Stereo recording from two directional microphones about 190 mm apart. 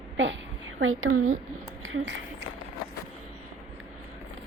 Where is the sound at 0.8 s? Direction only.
90° right.